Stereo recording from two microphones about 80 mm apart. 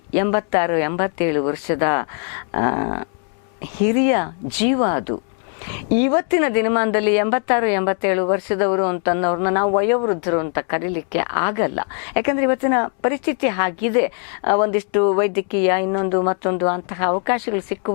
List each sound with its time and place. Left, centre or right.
0.1 s a woman's voice: centre